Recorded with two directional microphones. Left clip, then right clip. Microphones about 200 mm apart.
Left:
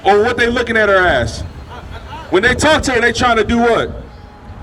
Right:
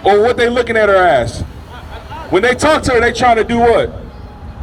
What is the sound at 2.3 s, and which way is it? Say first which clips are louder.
A man's voice: even; 40° left (ahead or behind).